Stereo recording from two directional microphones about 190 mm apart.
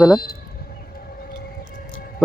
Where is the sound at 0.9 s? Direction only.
50° left (ahead or behind).